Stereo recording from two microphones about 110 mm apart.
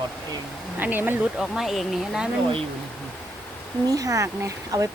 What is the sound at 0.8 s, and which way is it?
Speech, 15° right (ahead or behind).